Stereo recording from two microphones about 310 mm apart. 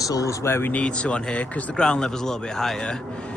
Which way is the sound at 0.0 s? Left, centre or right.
Centre.